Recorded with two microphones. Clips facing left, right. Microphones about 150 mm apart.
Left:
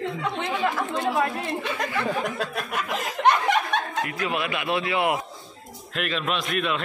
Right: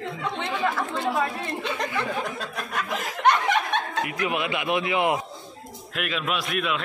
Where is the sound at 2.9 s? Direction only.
20° left (ahead or behind).